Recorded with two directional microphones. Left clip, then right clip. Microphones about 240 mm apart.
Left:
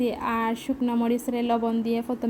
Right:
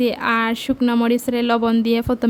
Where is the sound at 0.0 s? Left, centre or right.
Right.